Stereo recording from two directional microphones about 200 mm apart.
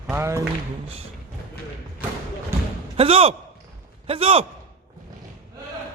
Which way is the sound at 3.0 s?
30° right (ahead or behind).